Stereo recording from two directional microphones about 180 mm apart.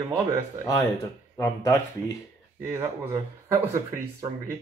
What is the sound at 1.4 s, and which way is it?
Speech, 20° left (ahead or behind).